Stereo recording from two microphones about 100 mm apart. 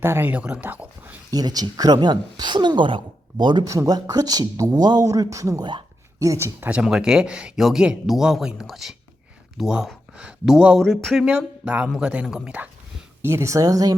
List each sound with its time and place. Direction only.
0.0 s speech: 20° right (ahead or behind)
1.3 s speech: 40° right (ahead or behind)
3.6 s speech: 35° right (ahead or behind)
6.7 s speech: 10° right (ahead or behind)
11.3 s speech: 10° right (ahead or behind)
13.2 s speech: 30° right (ahead or behind)